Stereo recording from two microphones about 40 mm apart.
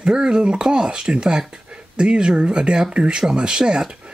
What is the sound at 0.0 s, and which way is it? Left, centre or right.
Speech, right.